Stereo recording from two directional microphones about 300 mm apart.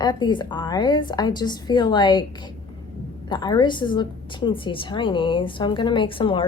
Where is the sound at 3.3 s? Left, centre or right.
Centre.